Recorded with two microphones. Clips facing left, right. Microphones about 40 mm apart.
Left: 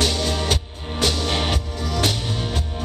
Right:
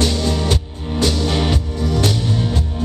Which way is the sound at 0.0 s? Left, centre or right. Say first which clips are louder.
Right 3 dB; left.